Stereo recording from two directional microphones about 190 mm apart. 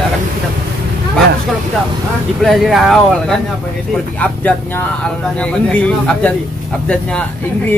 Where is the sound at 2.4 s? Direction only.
Centre (ahead or behind).